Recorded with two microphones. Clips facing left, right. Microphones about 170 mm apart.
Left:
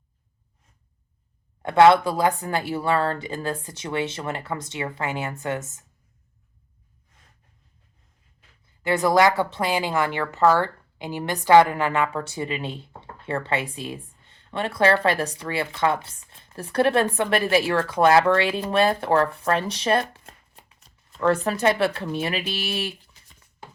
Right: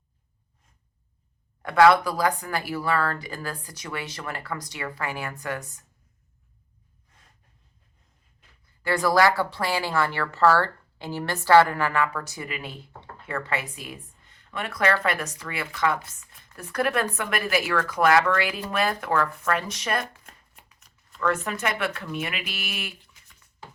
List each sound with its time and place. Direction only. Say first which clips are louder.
1.6 s speech: left 2 dB; 25° left (ahead or behind)
8.8 s speech: left 2 dB; 20° left (ahead or behind)